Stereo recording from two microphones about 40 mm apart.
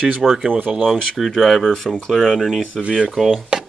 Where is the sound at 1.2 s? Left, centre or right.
Centre.